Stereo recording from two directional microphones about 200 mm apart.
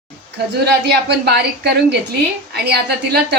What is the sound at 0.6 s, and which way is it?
A woman's voice, 55° right (ahead or behind).